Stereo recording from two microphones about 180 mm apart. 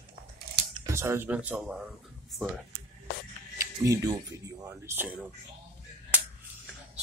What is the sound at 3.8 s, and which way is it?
Speech, 20° right (ahead or behind).